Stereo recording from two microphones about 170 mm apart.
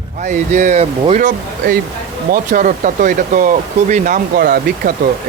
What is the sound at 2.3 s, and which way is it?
Speech, 50° right (ahead or behind).